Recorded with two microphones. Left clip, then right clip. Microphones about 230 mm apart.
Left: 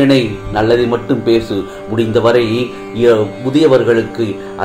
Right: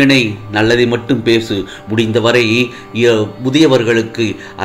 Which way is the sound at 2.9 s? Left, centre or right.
Right.